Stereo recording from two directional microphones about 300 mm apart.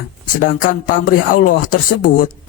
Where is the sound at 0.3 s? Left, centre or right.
Left.